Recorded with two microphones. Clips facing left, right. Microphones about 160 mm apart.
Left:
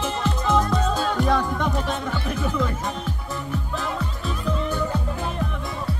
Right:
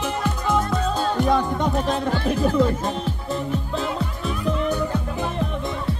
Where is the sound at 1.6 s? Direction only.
30° right (ahead or behind).